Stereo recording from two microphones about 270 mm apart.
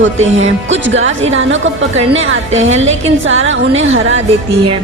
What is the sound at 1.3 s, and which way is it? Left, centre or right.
A woman's voice, right.